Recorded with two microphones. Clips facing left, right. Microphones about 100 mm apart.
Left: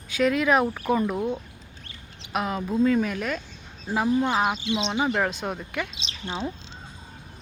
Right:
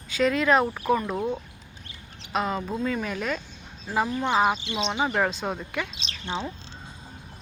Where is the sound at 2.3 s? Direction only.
5° left (ahead or behind).